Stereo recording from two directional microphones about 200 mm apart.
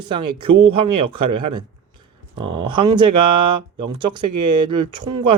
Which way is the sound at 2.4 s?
25° right (ahead or behind).